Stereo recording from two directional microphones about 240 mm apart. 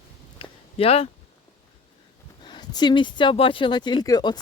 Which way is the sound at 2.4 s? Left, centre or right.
Centre.